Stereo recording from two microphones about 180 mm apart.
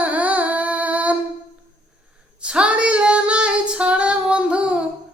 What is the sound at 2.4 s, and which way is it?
Female singing, 5° right (ahead or behind).